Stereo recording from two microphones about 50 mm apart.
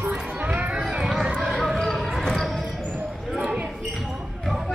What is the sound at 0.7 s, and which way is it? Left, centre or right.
Run, centre.